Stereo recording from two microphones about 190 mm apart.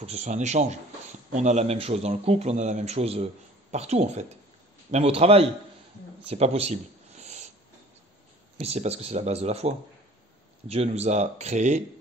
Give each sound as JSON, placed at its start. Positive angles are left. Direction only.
{"t": 0.0, "sound": "speech", "side_deg": -35}
{"t": 6.2, "sound": "a sound", "side_deg": -35}
{"t": 8.5, "sound": "speech", "side_deg": -35}